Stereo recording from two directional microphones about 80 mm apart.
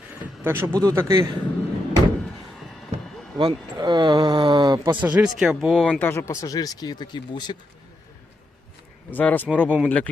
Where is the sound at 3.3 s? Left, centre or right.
Right.